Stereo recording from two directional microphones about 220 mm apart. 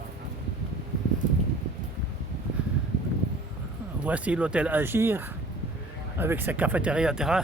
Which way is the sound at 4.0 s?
5° right (ahead or behind).